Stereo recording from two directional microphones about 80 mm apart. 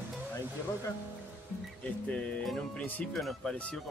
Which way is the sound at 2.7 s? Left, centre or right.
Left.